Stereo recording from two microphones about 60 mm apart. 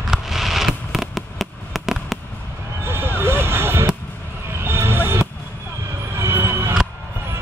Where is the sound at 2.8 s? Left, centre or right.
Right.